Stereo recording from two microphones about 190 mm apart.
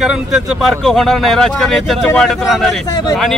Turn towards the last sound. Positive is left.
turn(degrees=20)  # may be behind; listen again after turning